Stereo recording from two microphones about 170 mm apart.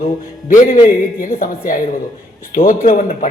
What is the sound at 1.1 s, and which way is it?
A woman's voice, 55° left (ahead or behind).